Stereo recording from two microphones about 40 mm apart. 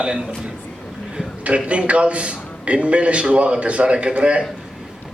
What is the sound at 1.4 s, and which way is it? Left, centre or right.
A man's voice, right.